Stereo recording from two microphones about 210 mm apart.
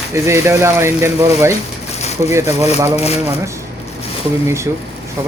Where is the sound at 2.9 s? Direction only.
30° left (ahead or behind).